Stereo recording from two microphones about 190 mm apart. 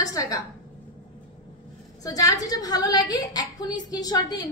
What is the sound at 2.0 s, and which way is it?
A woman's voice, 20° left (ahead or behind).